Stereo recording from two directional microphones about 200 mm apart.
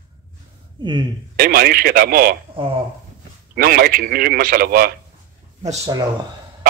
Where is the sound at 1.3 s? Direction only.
50° right (ahead or behind).